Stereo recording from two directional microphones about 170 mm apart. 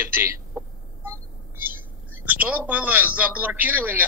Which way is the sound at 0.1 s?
15° right (ahead or behind).